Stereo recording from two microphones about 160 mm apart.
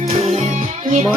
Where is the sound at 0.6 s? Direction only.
50° right (ahead or behind).